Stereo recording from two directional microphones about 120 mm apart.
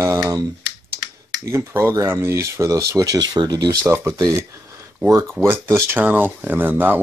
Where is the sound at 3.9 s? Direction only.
20° right (ahead or behind).